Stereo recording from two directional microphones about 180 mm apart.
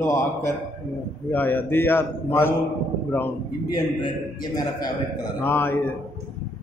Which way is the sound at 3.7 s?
25° left (ahead or behind).